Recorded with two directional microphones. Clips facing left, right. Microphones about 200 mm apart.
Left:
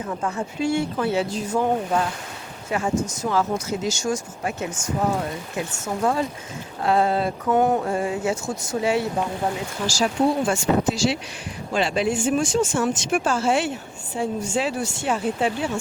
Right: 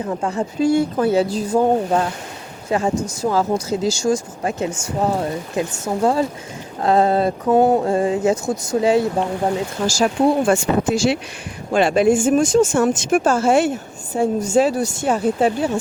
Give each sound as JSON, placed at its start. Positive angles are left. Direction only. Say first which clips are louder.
{"t": 0.0, "sound": "speech", "louder": "right 5 dB", "side_deg": -30}
{"t": 5.7, "sound": "speech", "louder": "right 4 dB", "side_deg": -35}
{"t": 9.8, "sound": "speech", "louder": "right 4 dB", "side_deg": -55}